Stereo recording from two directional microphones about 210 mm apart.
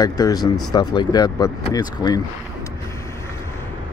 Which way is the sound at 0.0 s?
20° left (ahead or behind).